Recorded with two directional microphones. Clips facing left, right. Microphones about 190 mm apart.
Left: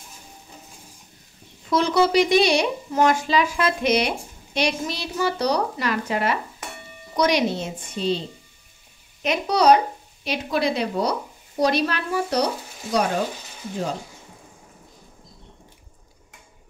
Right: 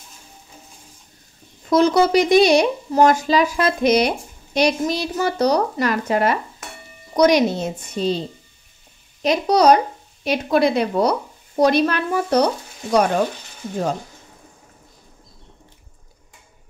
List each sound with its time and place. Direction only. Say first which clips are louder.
1.7 s speech: right 4 dB; 45° right (ahead or behind)
9.2 s speech: right 4 dB; 40° right (ahead or behind)